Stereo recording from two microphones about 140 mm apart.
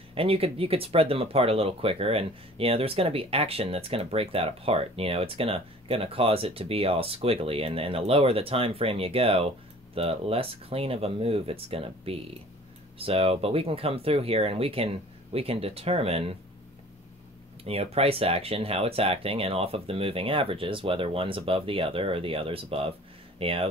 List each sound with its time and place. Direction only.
0.1 s speech: 40° right (ahead or behind)
17.9 s speech: 45° right (ahead or behind)